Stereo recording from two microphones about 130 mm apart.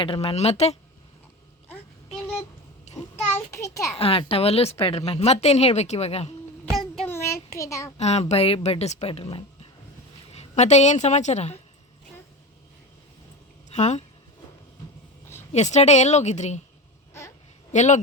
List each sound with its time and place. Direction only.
0.0 s a woman's voice: 45° left (ahead or behind)
2.9 s a sound: 20° left (ahead or behind)
3.9 s a woman's voice: 45° left (ahead or behind)
7.1 s child singing: 20° left (ahead or behind)
7.9 s speech: 55° left (ahead or behind)
10.3 s speech: 60° left (ahead or behind)
13.7 s speech: 65° left (ahead or behind)
15.5 s speech: 60° left (ahead or behind)
17.7 s speech: 65° left (ahead or behind)